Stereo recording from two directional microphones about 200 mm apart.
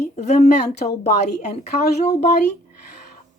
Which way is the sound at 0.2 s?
35° left (ahead or behind).